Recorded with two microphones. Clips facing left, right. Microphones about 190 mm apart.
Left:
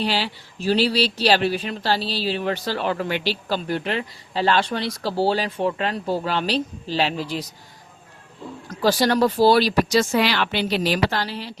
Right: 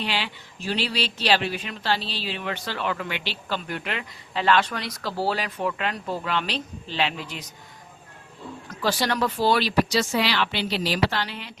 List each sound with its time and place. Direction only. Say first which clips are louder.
0.0 s speech: left 5 dB; 35° left (ahead or behind)
8.8 s speech: left 6 dB; 40° left (ahead or behind)